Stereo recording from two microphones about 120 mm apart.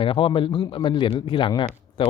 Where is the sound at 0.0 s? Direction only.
45° left (ahead or behind).